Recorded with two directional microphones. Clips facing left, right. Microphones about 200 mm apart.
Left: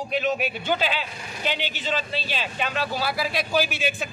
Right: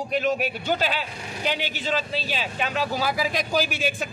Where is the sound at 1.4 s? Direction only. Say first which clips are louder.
Right 1 dB; 10° right (ahead or behind).